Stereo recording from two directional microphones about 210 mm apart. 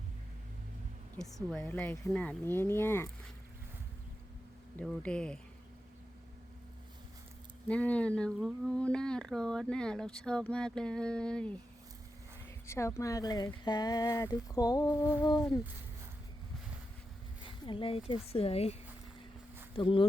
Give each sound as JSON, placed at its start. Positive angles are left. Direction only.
{"t": 1.1, "sound": "speech", "side_deg": 0}
{"t": 4.8, "sound": "speech", "side_deg": 5}
{"t": 7.7, "sound": "speech", "side_deg": 5}
{"t": 12.6, "sound": "speech", "side_deg": 15}
{"t": 17.7, "sound": "speech", "side_deg": 25}